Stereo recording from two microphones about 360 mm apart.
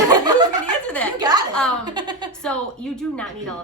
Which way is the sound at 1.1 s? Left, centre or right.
Centre.